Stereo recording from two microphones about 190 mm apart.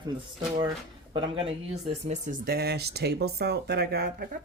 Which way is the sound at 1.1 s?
30° right (ahead or behind).